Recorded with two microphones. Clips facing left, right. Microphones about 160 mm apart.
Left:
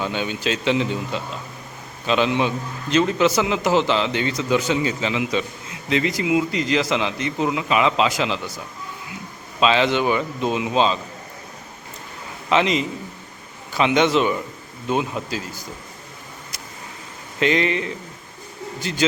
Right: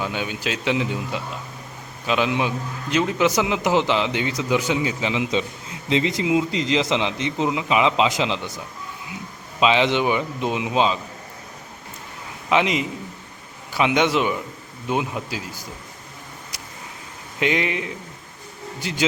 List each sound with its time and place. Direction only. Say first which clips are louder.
0.0 s a man's voice: left 2 dB; 10° right (ahead or behind)
5.2 s a man's voice: even; 25° right (ahead or behind)
12.5 s a man's voice: left 1 dB; 10° right (ahead or behind)
17.4 s a man's voice: left 3 dB; 10° right (ahead or behind)